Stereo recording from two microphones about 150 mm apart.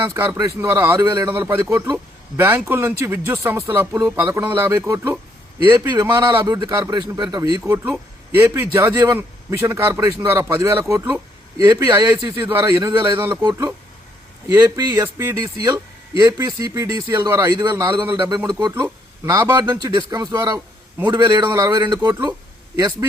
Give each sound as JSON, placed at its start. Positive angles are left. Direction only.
{"t": 0.0, "sound": "a man's voice", "side_deg": -20}
{"t": 6.3, "sound": "speech", "side_deg": -25}
{"t": 7.7, "sound": "a man's voice", "side_deg": -15}
{"t": 16.5, "sound": "a man's voice", "side_deg": -20}